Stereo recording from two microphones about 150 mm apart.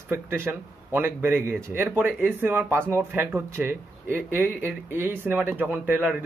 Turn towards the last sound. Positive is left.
turn(degrees=-10)  # may be behind; listen again after turning